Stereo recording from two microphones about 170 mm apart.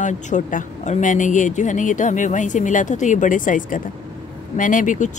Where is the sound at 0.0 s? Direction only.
50° left (ahead or behind).